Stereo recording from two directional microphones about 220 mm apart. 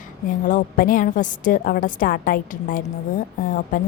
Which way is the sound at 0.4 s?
40° left (ahead or behind).